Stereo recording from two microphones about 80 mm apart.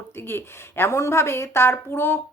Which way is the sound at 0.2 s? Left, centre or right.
Left.